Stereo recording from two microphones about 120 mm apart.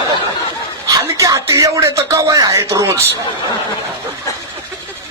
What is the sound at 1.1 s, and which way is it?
A man's voice, 25° right (ahead or behind).